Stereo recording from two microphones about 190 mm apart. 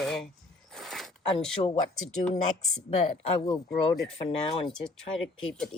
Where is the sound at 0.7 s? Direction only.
Centre (ahead or behind).